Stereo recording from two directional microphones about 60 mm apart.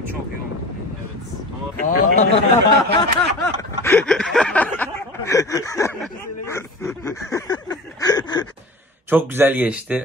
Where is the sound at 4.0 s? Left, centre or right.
Centre.